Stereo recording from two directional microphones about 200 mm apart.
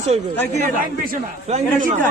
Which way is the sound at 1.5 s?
40° right (ahead or behind).